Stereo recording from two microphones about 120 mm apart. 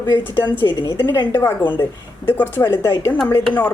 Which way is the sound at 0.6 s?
40° left (ahead or behind).